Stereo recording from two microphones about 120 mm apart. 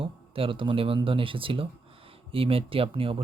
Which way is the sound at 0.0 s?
50° right (ahead or behind).